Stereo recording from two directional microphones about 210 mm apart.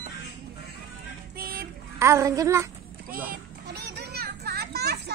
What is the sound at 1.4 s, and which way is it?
Child singing, 45° right (ahead or behind).